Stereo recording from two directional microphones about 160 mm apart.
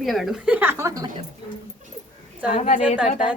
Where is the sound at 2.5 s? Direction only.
50° left (ahead or behind).